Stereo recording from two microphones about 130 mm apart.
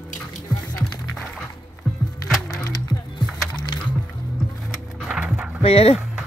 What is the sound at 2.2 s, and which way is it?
Music, centre (ahead or behind).